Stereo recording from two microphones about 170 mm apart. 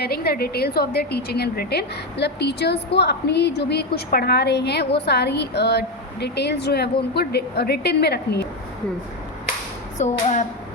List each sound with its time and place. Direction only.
0.0 s a woman's voice: 65° left (ahead or behind)
10.0 s speech: 40° left (ahead or behind)